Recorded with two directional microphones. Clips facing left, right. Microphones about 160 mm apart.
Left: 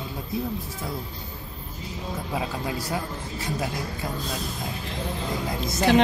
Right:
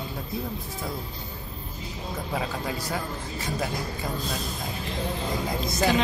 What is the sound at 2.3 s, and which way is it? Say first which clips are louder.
Speech: left 1 dB; 10° left (ahead or behind).